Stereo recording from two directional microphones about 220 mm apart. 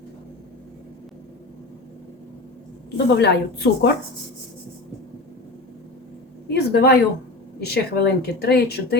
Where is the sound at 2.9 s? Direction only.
50° left (ahead or behind).